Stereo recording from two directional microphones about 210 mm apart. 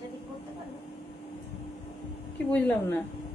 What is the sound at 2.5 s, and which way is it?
Speech, 10° left (ahead or behind).